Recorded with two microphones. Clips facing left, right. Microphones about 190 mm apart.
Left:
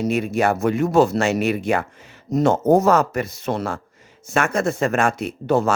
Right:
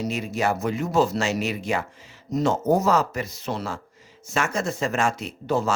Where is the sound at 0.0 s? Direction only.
55° left (ahead or behind).